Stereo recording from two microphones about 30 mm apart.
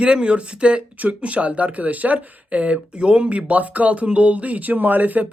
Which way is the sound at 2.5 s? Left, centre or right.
Right.